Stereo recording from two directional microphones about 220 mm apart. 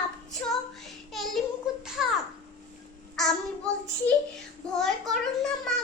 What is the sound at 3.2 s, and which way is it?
Child singing, 5° left (ahead or behind).